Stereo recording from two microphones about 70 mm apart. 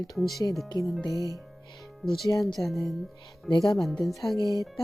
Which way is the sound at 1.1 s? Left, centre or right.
Right.